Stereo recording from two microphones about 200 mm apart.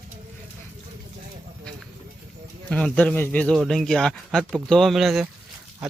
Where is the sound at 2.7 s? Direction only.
5° left (ahead or behind).